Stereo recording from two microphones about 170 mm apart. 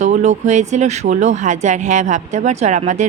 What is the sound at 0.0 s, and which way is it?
A woman's voice, 40° right (ahead or behind).